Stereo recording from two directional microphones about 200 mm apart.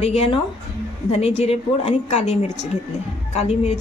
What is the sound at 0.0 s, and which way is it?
A woman's voice, 30° left (ahead or behind).